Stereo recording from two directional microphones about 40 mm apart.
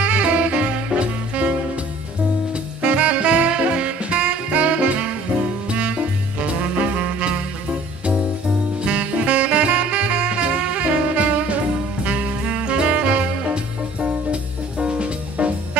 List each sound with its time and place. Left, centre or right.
0.0 s saxophone: right
2.8 s saxophone: right
5.7 s music: right
8.8 s saxophone: right
13.9 s music: right